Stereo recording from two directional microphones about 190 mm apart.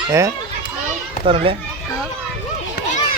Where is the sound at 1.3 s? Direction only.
30° right (ahead or behind).